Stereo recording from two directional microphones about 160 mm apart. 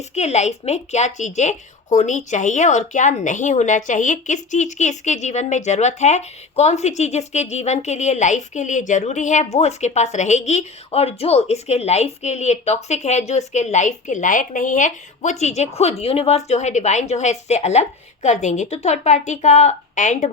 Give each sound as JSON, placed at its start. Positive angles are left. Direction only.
{"t": 0.1, "sound": "a woman's voice", "side_deg": 45}